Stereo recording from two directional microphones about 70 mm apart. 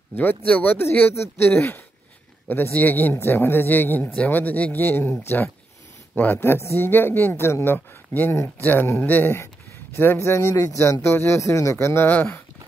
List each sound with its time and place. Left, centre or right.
0.1 s speech: left
0.8 s speech: left
6.3 s speech: left
9.9 s speech: left
10.5 s speech: left
10.8 s speech: left